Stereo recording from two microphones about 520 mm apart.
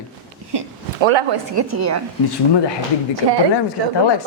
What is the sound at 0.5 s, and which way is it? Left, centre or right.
Speech, right.